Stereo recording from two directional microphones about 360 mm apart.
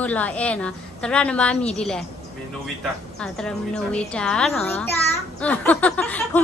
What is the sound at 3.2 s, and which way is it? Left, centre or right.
Speech, centre.